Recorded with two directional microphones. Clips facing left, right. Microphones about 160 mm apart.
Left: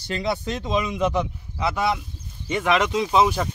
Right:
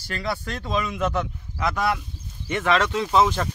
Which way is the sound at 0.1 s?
20° left (ahead or behind).